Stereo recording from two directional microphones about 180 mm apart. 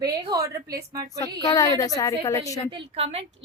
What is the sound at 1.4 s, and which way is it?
A woman's voice, 20° left (ahead or behind).